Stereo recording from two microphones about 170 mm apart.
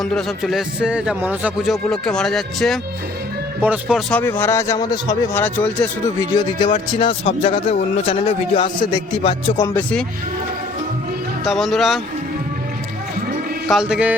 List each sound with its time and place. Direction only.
0.0 s a man's voice: 5° left (ahead or behind)
4.1 s speech: 15° left (ahead or behind)
5.4 s speech: 10° left (ahead or behind)
6.3 s speech: 25° left (ahead or behind)
9.6 s speech: 10° left (ahead or behind)
11.4 s a man's voice: centre (ahead or behind)
13.7 s a man's voice: 5° right (ahead or behind)